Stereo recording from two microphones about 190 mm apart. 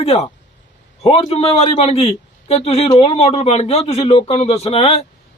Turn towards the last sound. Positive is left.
turn(degrees=30)  # may be behind; listen again after turning